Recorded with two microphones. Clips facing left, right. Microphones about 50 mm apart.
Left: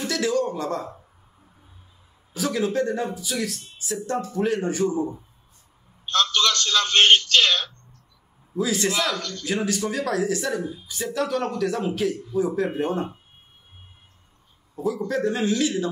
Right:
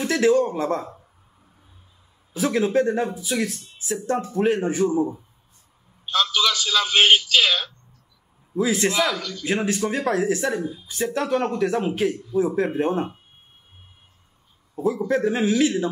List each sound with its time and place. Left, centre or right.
0.0 s speech: right
2.3 s speech: right
6.0 s a man's voice: centre
8.5 s speech: right
8.9 s a man's voice: centre
9.5 s speech: right
15.0 s a man's voice: centre
15.6 s speech: right